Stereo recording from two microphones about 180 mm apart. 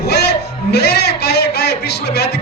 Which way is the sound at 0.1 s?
65° left (ahead or behind).